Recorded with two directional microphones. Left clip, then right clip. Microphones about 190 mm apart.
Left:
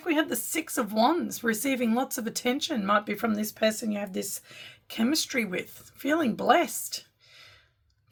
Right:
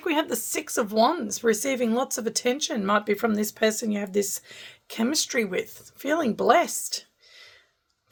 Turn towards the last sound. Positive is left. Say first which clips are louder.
# right 3 dB
turn(degrees=-20)  # may be behind; listen again after turning